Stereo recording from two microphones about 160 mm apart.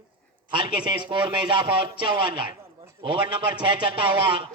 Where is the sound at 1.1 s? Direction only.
30° right (ahead or behind).